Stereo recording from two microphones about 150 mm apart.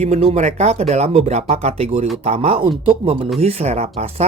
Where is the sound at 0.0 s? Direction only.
45° right (ahead or behind).